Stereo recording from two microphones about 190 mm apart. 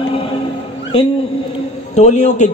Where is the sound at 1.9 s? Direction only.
35° left (ahead or behind).